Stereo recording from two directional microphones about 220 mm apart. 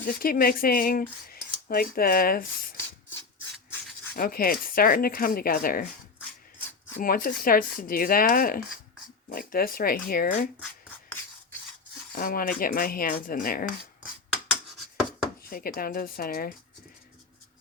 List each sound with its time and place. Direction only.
0.0 s speech: 40° left (ahead or behind)
4.1 s speech: 40° left (ahead or behind)
7.0 s speech: 40° left (ahead or behind)
12.1 s speech: 40° left (ahead or behind)
15.4 s speech: 40° left (ahead or behind)